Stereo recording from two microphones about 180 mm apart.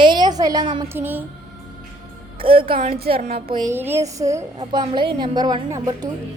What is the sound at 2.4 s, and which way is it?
Music, 30° right (ahead or behind).